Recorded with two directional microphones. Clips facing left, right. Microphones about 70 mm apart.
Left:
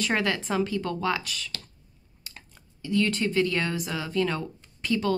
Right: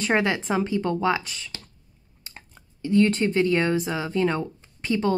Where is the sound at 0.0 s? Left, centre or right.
Right.